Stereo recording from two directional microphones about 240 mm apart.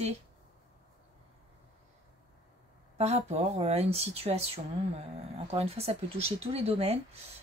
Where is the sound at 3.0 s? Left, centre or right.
Right.